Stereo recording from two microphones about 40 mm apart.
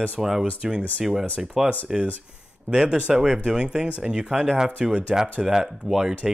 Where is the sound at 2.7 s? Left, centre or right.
Right.